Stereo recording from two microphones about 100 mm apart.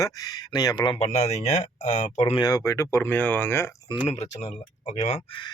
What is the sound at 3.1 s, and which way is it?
Speech, 15° left (ahead or behind).